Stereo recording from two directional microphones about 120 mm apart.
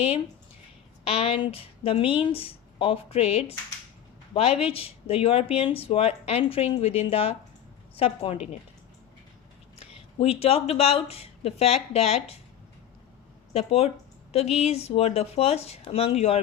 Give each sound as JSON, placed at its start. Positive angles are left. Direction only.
{"t": 1.0, "sound": "speech", "side_deg": 55}
{"t": 4.6, "sound": "speech", "side_deg": 55}
{"t": 9.9, "sound": "speech", "side_deg": 55}
{"t": 13.5, "sound": "speech", "side_deg": 55}